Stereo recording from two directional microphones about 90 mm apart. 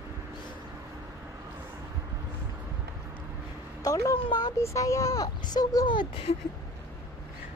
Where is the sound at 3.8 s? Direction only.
40° left (ahead or behind); by 6.4 s 75° left (ahead or behind).